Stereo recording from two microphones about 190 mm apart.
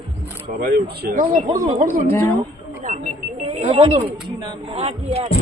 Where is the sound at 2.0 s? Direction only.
10° left (ahead or behind).